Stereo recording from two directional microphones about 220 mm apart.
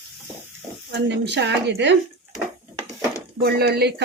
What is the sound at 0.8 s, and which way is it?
Speech, 50° right (ahead or behind).